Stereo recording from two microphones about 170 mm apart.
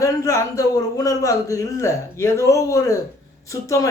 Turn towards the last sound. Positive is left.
turn(degrees=20)  # may be behind; listen again after turning